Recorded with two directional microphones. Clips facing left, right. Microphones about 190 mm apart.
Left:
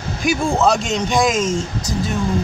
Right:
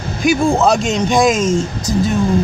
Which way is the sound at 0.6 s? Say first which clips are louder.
Right 3 dB; 15° right (ahead or behind).